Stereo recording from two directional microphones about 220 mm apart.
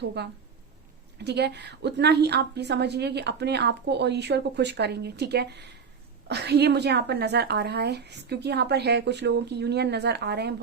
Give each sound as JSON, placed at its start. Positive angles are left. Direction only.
{"t": 0.0, "sound": "a woman's voice", "side_deg": -50}